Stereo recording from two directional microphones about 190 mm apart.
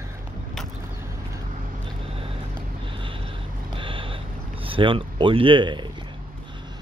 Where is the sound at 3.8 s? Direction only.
25° right (ahead or behind).